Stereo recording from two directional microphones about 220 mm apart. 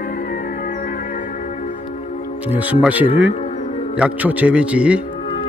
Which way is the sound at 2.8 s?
5° right (ahead or behind).